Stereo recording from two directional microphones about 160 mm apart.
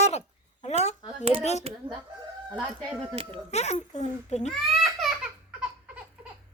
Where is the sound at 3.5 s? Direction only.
40° left (ahead or behind).